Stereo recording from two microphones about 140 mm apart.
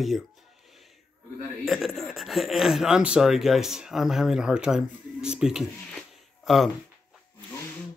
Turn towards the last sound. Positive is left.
turn(degrees=0)  # may be behind; listen again after turning